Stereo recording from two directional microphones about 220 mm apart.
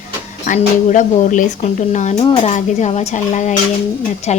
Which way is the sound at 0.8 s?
35° left (ahead or behind).